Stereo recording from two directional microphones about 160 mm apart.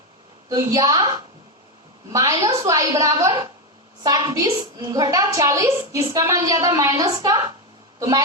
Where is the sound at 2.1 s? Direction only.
20° right (ahead or behind).